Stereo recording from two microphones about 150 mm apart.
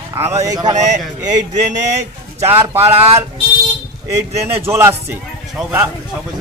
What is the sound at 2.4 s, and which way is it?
Speech, 15° right (ahead or behind).